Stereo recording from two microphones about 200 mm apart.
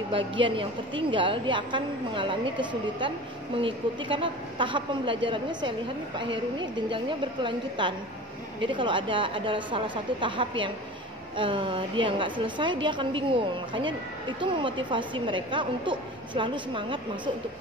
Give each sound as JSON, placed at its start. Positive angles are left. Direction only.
{"t": 0.5, "sound": "a woman's voice", "side_deg": -25}